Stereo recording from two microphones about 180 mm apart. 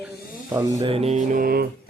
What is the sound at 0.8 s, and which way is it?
Music, 35° right (ahead or behind).